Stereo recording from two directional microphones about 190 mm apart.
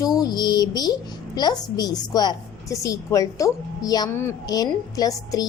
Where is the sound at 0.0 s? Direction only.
20° left (ahead or behind).